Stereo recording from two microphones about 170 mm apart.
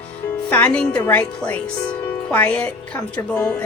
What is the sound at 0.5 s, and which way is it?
Speech, 10° left (ahead or behind).